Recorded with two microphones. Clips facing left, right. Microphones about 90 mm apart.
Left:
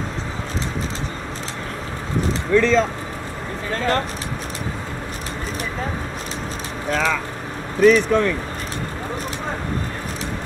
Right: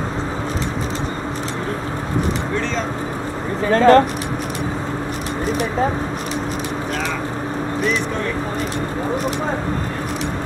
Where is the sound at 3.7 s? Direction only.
60° right (ahead or behind).